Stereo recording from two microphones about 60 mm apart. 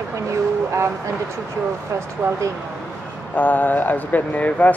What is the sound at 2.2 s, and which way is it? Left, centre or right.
Speech, right.